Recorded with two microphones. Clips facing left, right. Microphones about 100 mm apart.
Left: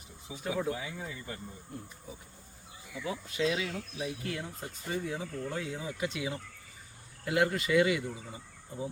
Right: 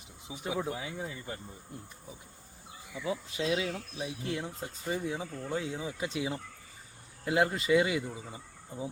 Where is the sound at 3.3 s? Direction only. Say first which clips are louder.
Left 2 dB; 25° right (ahead or behind).